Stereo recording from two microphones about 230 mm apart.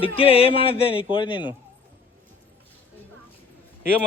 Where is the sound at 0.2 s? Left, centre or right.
Left.